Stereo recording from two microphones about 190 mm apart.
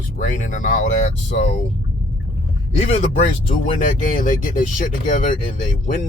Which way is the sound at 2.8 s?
35° left (ahead or behind).